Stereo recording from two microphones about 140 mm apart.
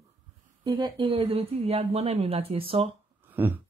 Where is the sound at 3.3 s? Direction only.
15° right (ahead or behind).